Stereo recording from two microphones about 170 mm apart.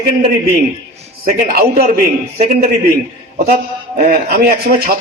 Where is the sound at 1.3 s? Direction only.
60° right (ahead or behind).